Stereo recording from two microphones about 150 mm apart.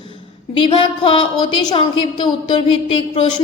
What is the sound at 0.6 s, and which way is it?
A woman's voice, 35° left (ahead or behind).